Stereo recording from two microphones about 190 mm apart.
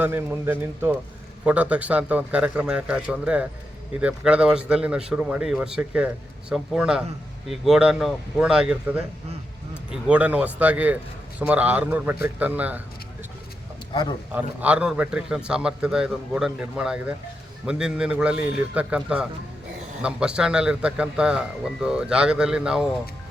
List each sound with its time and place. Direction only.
0.0 s a man's voice: 10° right (ahead or behind)
9.9 s a man's voice: 5° right (ahead or behind)
13.9 s a man's voice: 25° left (ahead or behind)
14.3 s a man's voice: 5° right (ahead or behind)